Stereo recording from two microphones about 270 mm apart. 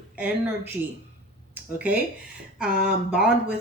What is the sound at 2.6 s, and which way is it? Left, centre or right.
Speech, right.